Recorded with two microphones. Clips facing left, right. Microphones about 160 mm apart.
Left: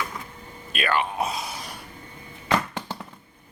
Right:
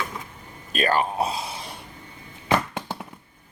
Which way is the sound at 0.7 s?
40° right (ahead or behind).